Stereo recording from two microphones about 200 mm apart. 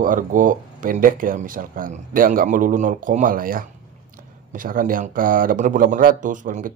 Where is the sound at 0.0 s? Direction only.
40° right (ahead or behind).